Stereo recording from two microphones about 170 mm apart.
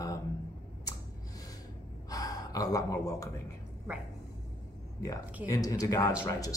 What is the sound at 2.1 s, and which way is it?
Speech, 20° left (ahead or behind).